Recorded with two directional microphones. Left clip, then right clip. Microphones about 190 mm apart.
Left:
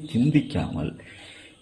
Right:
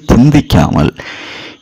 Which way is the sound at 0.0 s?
45° right (ahead or behind).